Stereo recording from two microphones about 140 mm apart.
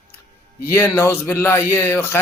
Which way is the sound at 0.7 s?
20° left (ahead or behind).